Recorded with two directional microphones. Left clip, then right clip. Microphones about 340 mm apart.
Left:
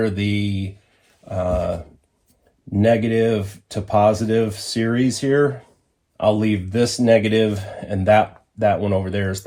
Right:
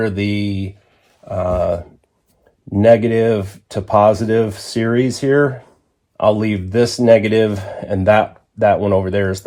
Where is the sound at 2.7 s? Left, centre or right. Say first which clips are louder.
Right 6 dB; right.